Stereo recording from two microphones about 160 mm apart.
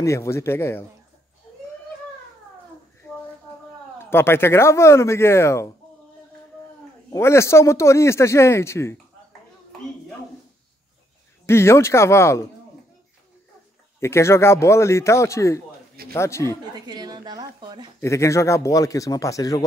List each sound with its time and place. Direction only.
0.0 s a man's voice: 20° left (ahead or behind)
4.0 s a man's voice: 15° left (ahead or behind)
7.1 s a man's voice: 15° left (ahead or behind)
11.4 s a man's voice: 15° left (ahead or behind)
13.9 s a man's voice: 15° left (ahead or behind)
16.7 s a woman's voice: 25° right (ahead or behind)
18.0 s a man's voice: 20° left (ahead or behind)